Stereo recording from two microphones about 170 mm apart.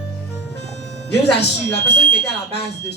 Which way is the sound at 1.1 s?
75° left (ahead or behind).